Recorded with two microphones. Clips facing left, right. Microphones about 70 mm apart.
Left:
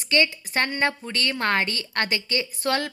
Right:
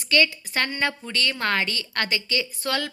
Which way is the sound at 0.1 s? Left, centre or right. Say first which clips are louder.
Right 1 dB; left.